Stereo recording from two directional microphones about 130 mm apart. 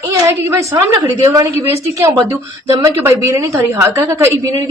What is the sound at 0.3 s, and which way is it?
A woman's voice, 20° right (ahead or behind).